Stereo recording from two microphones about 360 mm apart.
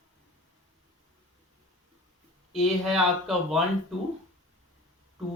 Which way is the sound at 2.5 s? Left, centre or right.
Centre.